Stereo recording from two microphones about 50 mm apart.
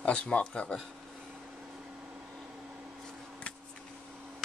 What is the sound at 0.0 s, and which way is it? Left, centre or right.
Speech, left.